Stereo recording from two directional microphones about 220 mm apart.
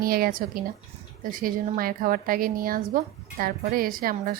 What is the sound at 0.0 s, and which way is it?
A woman's voice, 40° right (ahead or behind).